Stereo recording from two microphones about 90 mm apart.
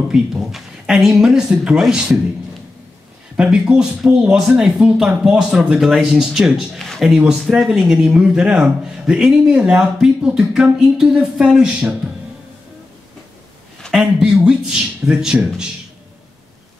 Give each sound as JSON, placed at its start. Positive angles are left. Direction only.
{"t": 0.1, "sound": "speech", "side_deg": -5}
{"t": 3.3, "sound": "speech", "side_deg": -10}
{"t": 13.9, "sound": "speech", "side_deg": -5}